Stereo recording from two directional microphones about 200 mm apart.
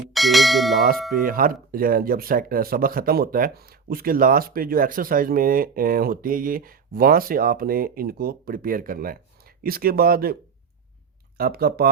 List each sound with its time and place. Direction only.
0.1 s bell: centre (ahead or behind)
1.1 s speech: 45° right (ahead or behind)
11.3 s speech: 50° right (ahead or behind)